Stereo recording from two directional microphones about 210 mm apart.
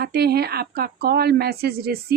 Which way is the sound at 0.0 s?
50° right (ahead or behind).